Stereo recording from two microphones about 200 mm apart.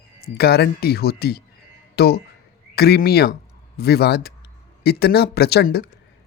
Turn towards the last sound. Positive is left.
turn(degrees=50)  # may be behind; listen again after turning